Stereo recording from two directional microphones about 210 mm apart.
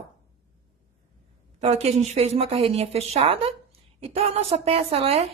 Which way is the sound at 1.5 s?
30° right (ahead or behind).